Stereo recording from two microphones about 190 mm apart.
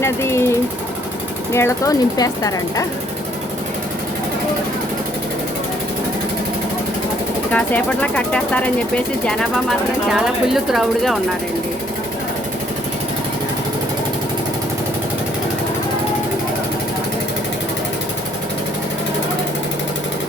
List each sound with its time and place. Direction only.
0.0 s speech: 15° left (ahead or behind)
1.5 s speech: 15° left (ahead or behind)
7.5 s speech: 5° left (ahead or behind)